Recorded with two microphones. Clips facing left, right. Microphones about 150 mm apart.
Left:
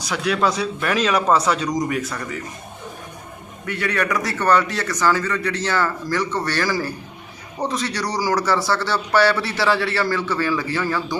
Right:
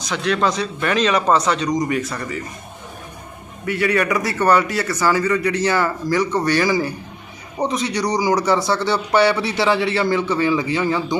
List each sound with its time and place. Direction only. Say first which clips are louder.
0.0 s speech: right 1 dB; 10° left (ahead or behind)
3.7 s a man's voice: right 4 dB; 10° right (ahead or behind)